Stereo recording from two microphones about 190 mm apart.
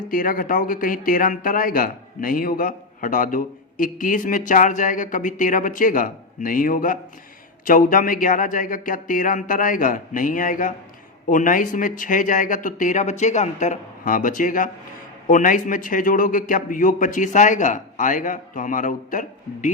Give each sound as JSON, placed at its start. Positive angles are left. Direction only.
{"t": 0.1, "sound": "speech", "side_deg": 45}